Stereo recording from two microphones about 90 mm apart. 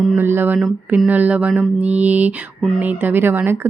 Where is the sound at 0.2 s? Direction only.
25° right (ahead or behind).